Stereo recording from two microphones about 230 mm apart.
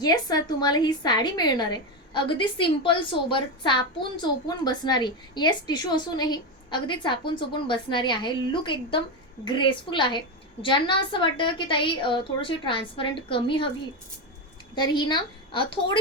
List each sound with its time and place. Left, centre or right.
0.0 s a woman's voice: centre
14.8 s a woman's voice: centre